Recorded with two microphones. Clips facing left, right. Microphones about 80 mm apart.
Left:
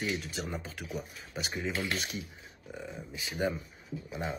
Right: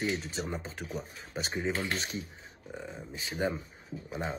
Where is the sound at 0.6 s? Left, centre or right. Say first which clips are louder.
Right 1 dB; right.